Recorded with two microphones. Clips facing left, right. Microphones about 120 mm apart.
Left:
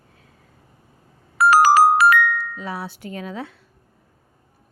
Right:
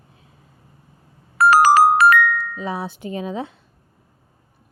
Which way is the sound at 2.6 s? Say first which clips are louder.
Right 4 dB; 20° right (ahead or behind).